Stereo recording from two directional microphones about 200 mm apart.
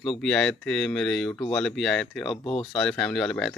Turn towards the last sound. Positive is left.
turn(degrees=0)  # may be behind; listen again after turning